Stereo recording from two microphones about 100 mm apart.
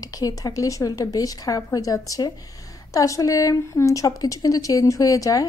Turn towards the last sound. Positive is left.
turn(degrees=35)  # may be behind; listen again after turning